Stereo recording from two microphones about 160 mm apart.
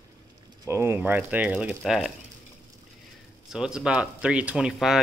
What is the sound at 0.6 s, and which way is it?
Speech, 15° right (ahead or behind).